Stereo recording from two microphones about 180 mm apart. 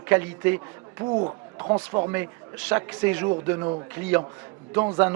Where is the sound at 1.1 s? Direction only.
30° right (ahead or behind).